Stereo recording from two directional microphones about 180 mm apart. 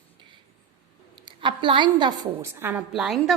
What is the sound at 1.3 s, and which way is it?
A woman's voice, 25° right (ahead or behind).